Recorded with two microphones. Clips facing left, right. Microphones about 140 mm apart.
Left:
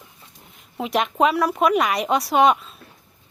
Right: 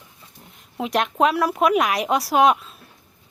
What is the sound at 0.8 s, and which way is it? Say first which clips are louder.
A woman's voice: even; centre (ahead or behind).